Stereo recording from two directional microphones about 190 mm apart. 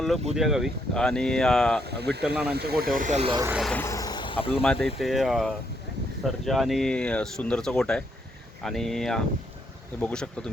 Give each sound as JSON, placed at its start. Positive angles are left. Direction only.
{"t": 0.3, "sound": "speech", "side_deg": 0}
{"t": 1.8, "sound": "speech", "side_deg": -60}
{"t": 2.2, "sound": "speech", "side_deg": -5}
{"t": 2.5, "sound": "speech", "side_deg": -55}
{"t": 3.2, "sound": "speech", "side_deg": -20}
{"t": 3.5, "sound": "speech", "side_deg": 0}
{"t": 3.8, "sound": "speech", "side_deg": 15}
{"t": 4.6, "sound": "speech", "side_deg": 5}